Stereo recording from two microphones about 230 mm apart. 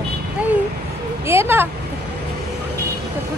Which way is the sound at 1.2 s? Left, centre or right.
Centre.